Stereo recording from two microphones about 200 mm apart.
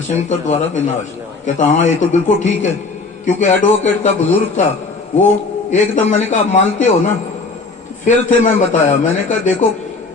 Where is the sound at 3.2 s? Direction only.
35° left (ahead or behind).